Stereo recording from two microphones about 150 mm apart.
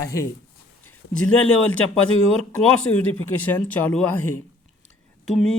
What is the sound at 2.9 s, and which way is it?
Speech, 20° left (ahead or behind).